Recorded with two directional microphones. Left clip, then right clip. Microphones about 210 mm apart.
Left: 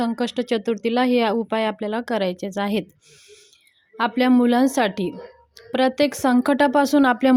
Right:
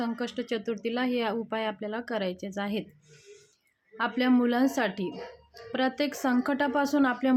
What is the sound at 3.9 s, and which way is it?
Speech, 35° left (ahead or behind).